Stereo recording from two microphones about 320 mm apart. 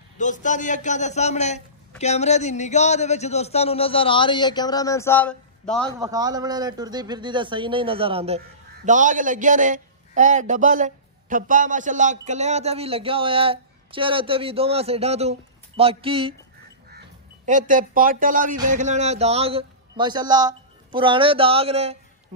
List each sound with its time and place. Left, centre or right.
0.2 s a man's voice: left; by 5.9 s centre
5.9 s a man's voice: centre
17.5 s a man's voice: right